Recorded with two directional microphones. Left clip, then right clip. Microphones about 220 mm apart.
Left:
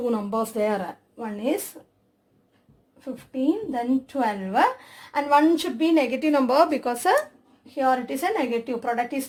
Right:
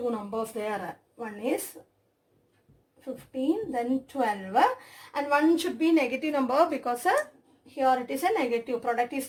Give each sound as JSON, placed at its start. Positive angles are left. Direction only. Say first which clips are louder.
{"t": 0.2, "sound": "speech", "louder": "left 7 dB", "side_deg": 50}
{"t": 1.2, "sound": "a woman's voice", "louder": "left 4 dB", "side_deg": 30}
{"t": 3.0, "sound": "a woman's voice", "louder": "left 4 dB", "side_deg": 30}
{"t": 7.8, "sound": "a woman's voice", "louder": "left 2 dB", "side_deg": 30}